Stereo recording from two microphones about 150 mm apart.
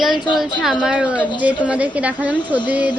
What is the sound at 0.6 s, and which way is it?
Speech, 5° right (ahead or behind).